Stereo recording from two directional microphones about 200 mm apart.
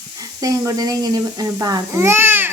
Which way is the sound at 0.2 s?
20° right (ahead or behind).